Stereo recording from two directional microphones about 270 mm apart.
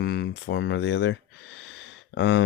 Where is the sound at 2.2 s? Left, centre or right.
Left.